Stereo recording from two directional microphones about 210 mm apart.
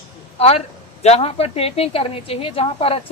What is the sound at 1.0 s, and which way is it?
A woman's voice, 30° left (ahead or behind).